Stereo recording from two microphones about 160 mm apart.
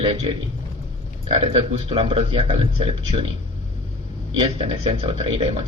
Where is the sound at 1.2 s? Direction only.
40° right (ahead or behind).